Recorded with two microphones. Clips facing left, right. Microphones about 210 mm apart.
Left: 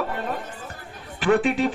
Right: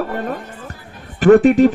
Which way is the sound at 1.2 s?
45° right (ahead or behind).